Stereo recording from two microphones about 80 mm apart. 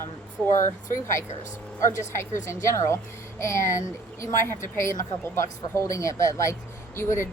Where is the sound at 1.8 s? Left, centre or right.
Left.